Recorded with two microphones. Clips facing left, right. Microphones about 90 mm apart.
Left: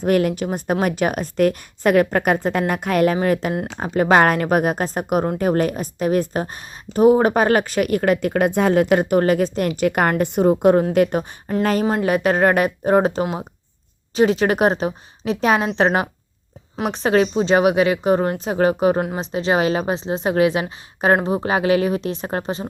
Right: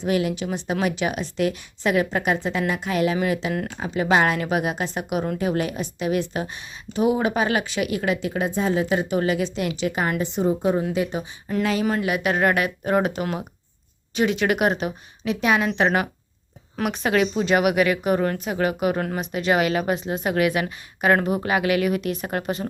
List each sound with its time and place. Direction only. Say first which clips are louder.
0.0 s a woman's voice: left 5 dB; 50° left (ahead or behind); by 22.6 s 30° left (ahead or behind)